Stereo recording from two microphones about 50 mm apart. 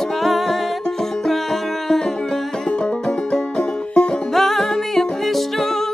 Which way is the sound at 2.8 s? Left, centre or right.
Centre.